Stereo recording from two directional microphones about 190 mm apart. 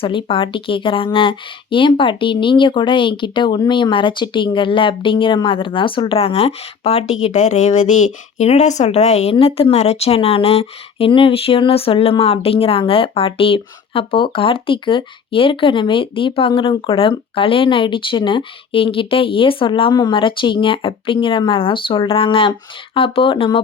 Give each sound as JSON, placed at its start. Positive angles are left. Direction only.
{"t": 0.0, "sound": "speech", "side_deg": 25}